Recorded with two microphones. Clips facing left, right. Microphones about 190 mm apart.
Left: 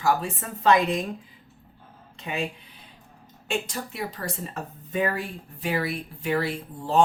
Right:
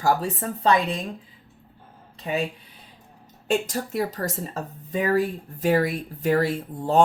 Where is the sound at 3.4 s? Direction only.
40° right (ahead or behind).